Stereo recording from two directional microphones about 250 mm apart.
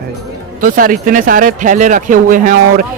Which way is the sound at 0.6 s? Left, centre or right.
Right.